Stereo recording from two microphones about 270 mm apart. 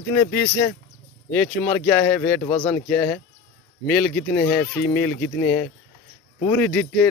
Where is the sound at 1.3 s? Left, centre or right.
Centre.